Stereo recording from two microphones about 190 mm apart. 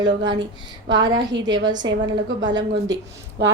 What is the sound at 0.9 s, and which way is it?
Speech, 20° right (ahead or behind).